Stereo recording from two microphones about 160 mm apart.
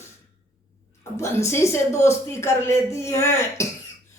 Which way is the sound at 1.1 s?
15° left (ahead or behind).